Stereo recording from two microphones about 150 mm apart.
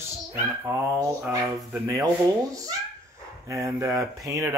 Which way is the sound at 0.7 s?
20° right (ahead or behind).